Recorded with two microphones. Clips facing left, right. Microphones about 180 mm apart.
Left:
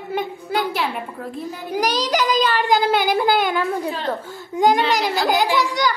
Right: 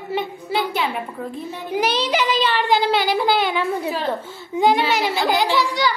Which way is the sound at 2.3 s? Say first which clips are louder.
Left 2 dB; 45° left (ahead or behind).